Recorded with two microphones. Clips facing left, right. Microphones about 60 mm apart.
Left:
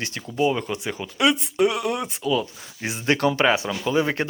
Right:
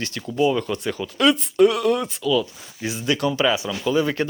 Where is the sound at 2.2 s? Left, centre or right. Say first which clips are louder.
Right 2 dB; left.